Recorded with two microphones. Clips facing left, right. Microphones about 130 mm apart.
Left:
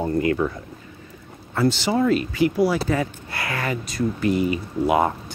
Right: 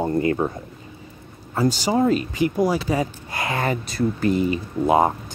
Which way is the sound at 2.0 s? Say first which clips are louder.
Right 1 dB; 35° right (ahead or behind).